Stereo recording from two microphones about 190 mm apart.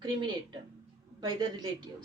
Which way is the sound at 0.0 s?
25° right (ahead or behind).